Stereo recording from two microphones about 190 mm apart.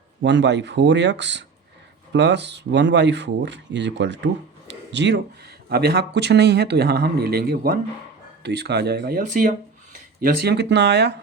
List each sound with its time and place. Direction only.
0.2 s speech: 65° right (ahead or behind)
4.7 s a sound: 70° right (ahead or behind)
5.6 s speech: 60° right (ahead or behind)